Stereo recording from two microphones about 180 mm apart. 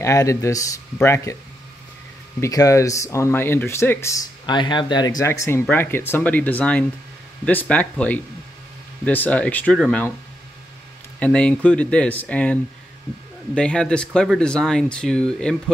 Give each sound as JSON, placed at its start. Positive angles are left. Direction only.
{"t": 0.0, "sound": "speech", "side_deg": 15}
{"t": 2.4, "sound": "speech", "side_deg": 20}
{"t": 11.1, "sound": "speech", "side_deg": 5}
{"t": 13.6, "sound": "speech", "side_deg": 5}